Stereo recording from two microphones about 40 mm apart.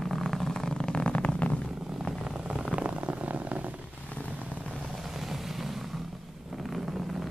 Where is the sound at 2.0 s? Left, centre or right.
Centre; by 3.7 s right.